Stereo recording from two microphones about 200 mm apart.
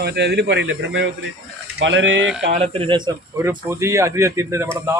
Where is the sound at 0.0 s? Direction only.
55° right (ahead or behind).